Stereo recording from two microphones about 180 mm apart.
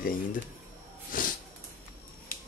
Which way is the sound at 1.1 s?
50° left (ahead or behind).